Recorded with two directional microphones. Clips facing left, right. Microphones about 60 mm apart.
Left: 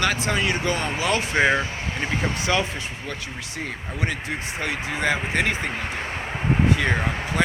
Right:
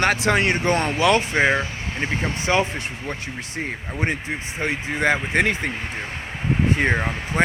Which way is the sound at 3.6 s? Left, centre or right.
Right.